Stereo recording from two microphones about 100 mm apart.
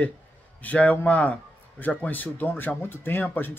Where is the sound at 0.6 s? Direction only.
15° left (ahead or behind).